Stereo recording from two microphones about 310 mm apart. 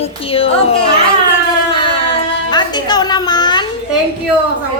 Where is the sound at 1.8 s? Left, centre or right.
Centre.